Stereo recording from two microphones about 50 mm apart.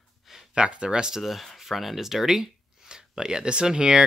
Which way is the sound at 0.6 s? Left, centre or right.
Right.